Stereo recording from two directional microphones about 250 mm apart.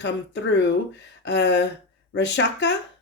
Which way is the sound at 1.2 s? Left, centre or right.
Left.